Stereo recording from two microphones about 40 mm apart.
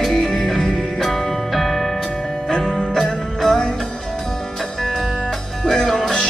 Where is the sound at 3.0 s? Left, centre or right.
Centre.